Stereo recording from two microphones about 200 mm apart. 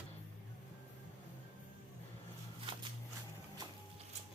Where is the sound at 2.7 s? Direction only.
25° right (ahead or behind).